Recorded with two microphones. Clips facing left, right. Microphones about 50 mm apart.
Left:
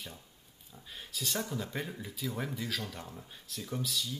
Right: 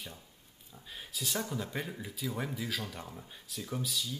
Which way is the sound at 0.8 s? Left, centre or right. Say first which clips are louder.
Even; centre.